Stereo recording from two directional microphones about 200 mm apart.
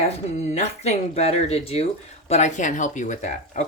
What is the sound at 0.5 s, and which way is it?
A woman's voice, 35° left (ahead or behind).